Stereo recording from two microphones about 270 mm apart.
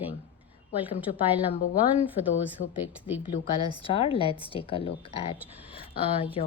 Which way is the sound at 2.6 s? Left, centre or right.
Left.